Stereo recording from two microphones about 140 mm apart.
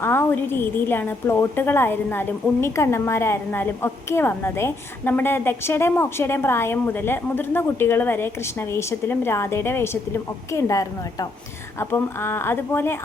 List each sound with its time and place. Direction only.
0.0 s a woman's voice: 15° left (ahead or behind)